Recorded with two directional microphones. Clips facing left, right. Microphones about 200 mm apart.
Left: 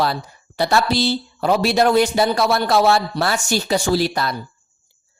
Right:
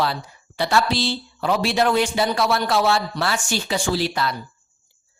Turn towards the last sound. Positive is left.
turn(degrees=40)  # may be behind; listen again after turning